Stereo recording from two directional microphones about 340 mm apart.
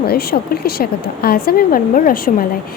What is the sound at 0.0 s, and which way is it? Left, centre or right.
A woman's voice, left.